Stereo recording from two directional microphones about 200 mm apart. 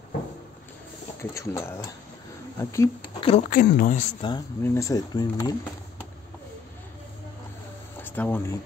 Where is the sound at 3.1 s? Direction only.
30° left (ahead or behind).